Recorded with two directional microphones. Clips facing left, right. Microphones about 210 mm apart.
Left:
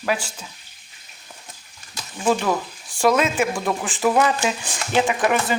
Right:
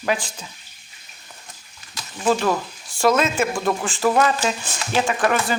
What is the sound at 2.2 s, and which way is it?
Speech, 15° left (ahead or behind).